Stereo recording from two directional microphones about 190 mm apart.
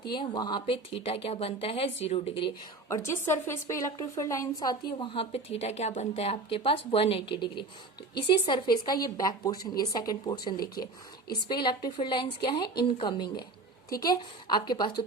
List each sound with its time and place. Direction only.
0.1 s a woman's voice: 25° left (ahead or behind)
2.9 s a woman's voice: 15° left (ahead or behind)